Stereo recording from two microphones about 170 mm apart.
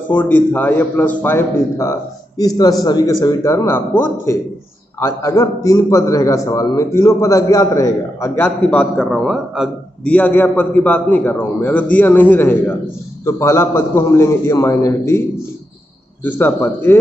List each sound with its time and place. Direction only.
0.1 s a man's voice: 10° left (ahead or behind)
10.1 s a man's voice: 10° left (ahead or behind)
16.3 s a man's voice: 15° left (ahead or behind)